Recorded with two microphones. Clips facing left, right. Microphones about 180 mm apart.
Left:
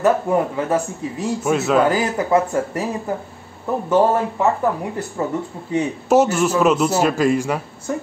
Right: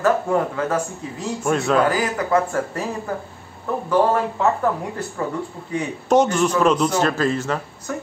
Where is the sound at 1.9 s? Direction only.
25° left (ahead or behind).